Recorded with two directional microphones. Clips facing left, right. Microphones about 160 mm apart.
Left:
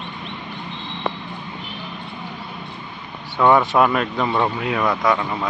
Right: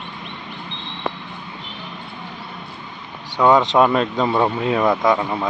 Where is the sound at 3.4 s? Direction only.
15° right (ahead or behind).